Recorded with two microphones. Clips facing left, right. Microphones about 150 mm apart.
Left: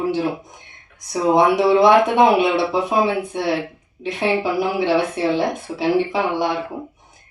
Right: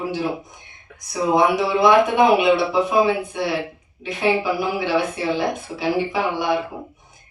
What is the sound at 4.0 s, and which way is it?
Speech, 25° left (ahead or behind).